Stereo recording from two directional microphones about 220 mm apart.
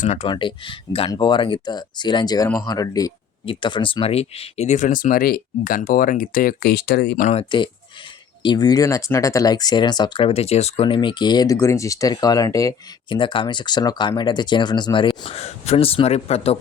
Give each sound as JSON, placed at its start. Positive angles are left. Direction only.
{"t": 0.0, "sound": "speech", "side_deg": 30}
{"t": 8.4, "sound": "speech", "side_deg": 20}